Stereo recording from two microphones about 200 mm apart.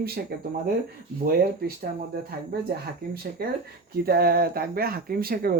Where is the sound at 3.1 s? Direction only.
50° right (ahead or behind).